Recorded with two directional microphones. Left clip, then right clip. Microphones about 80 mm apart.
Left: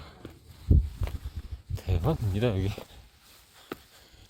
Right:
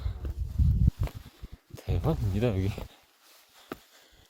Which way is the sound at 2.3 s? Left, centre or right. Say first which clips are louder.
Left 1 dB; centre.